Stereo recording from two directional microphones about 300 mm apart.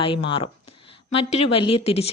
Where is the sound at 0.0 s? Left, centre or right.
Centre.